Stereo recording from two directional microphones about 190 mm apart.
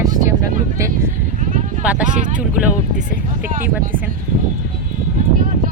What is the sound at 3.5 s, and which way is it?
Speech, 45° right (ahead or behind).